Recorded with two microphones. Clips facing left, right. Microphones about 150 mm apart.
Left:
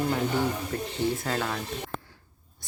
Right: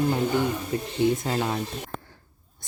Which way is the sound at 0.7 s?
15° right (ahead or behind).